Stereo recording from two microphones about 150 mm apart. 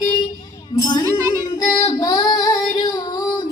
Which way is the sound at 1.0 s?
25° right (ahead or behind).